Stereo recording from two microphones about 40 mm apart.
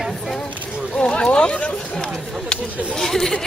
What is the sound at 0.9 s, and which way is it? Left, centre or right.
Speech, left.